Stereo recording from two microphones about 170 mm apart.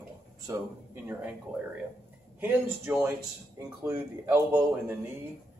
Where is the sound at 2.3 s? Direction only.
10° right (ahead or behind).